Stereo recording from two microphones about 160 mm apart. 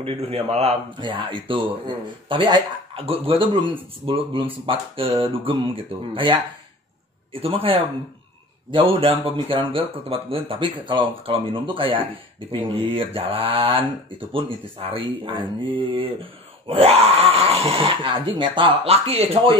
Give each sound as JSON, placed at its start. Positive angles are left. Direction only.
{"t": 0.0, "sound": "speech", "side_deg": -35}